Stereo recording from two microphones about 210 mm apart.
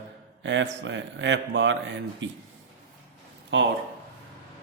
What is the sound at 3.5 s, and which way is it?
Speech, 60° right (ahead or behind).